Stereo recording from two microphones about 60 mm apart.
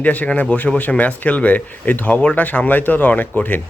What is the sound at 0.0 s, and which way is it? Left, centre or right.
Speech, left.